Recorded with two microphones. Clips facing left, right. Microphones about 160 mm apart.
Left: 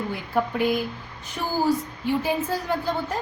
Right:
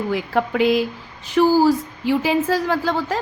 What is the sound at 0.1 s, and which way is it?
Speech, 90° right.